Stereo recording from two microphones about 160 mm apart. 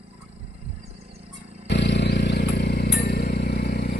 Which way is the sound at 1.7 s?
90° left.